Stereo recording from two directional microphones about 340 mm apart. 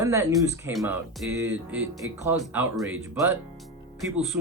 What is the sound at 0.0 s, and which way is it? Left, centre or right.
Speech, centre.